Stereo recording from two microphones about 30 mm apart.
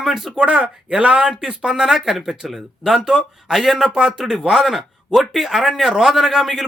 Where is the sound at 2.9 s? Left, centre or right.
Centre.